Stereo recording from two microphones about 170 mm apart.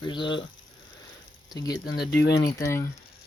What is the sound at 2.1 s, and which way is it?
Speech, 85° left.